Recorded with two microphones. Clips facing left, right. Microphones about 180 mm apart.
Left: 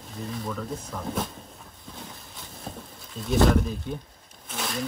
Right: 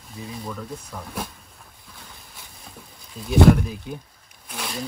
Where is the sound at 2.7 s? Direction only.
35° left (ahead or behind).